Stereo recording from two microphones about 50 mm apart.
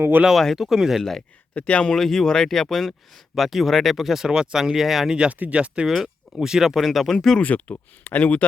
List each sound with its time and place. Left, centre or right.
0.3 s speech: centre
1.5 s speech: left
2.0 s speech: centre
5.1 s speech: centre
6.4 s speech: centre
6.8 s speech: centre
7.3 s speech: left